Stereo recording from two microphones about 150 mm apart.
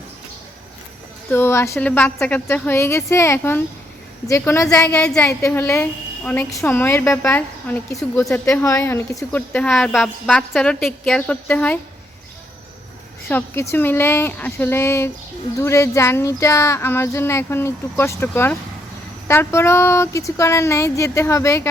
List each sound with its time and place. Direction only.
1.3 s a woman's voice: 15° left (ahead or behind)
4.9 s a woman's voice: 5° left (ahead or behind)
13.2 s a woman's voice: 15° left (ahead or behind)